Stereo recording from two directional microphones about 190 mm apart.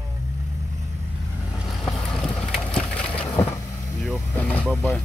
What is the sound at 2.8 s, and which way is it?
Wood, 5° left (ahead or behind).